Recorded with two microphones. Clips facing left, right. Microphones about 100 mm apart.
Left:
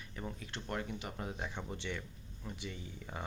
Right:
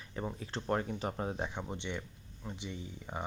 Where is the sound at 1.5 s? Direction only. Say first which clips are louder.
Right 2 dB; 15° right (ahead or behind).